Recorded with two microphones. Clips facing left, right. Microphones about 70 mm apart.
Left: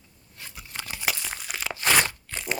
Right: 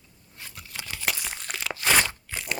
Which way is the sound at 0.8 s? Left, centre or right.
Left.